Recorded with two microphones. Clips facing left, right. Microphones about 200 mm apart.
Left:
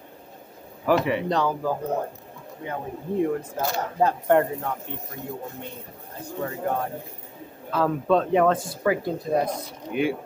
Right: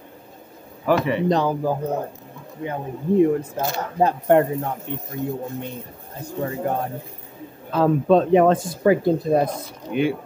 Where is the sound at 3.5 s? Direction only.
20° right (ahead or behind).